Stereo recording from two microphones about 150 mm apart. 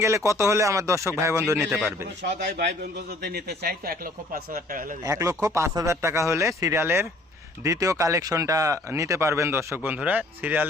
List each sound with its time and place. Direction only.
0.0 s speech: 20° right (ahead or behind)
3.2 s speech: 90° right; by 4.9 s 65° right (ahead or behind)
5.0 s speech: 20° right (ahead or behind)